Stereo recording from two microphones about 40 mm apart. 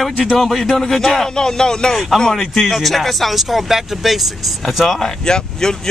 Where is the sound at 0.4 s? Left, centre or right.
Centre.